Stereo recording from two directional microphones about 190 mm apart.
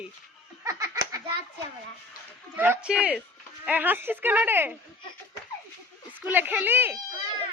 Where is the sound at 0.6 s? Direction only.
20° right (ahead or behind).